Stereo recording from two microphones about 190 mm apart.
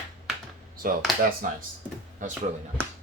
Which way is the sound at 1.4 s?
45° right (ahead or behind).